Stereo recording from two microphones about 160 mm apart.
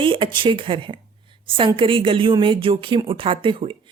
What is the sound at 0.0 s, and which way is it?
Speech, 30° right (ahead or behind).